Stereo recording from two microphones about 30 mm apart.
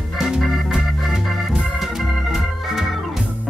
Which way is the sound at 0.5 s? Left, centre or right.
Centre.